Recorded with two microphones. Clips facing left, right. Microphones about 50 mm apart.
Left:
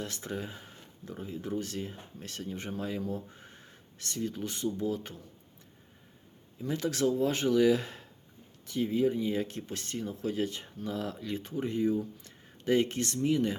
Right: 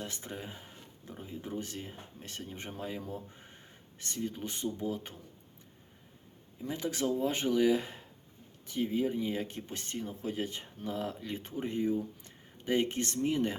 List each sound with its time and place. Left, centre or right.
0.0 s speech: centre
6.6 s speech: centre; by 13.6 s right